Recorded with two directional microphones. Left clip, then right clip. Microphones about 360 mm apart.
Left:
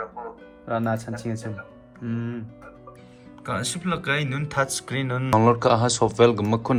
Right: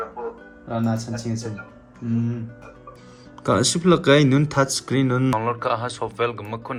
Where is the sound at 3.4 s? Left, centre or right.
Centre.